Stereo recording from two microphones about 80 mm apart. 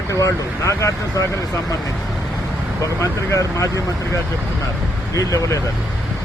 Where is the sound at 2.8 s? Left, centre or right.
Left.